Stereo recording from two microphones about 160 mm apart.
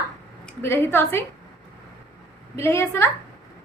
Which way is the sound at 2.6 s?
15° left (ahead or behind).